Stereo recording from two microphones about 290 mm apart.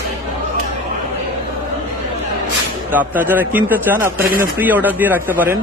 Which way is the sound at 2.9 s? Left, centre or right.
Centre.